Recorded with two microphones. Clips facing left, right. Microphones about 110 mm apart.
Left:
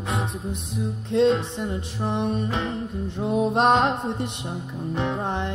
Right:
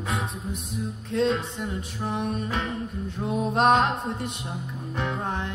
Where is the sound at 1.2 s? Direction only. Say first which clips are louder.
Left 5 dB; centre (ahead or behind).